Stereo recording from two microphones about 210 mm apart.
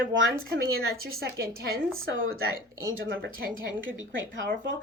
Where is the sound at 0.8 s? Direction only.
75° right (ahead or behind).